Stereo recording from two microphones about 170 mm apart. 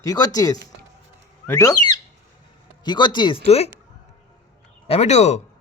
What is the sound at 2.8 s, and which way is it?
Speech, 25° left (ahead or behind).